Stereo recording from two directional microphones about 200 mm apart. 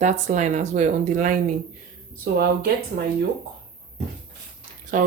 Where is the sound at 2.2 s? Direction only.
50° right (ahead or behind).